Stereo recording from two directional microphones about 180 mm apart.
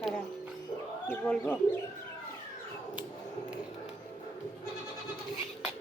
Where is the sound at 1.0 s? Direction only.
10° left (ahead or behind).